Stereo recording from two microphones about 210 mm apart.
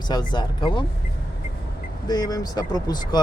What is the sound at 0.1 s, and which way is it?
Speech, 20° left (ahead or behind).